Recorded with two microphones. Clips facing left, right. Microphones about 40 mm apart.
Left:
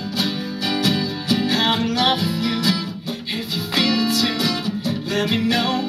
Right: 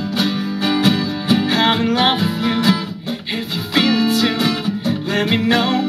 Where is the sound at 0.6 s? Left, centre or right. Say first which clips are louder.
Right 4 dB; right.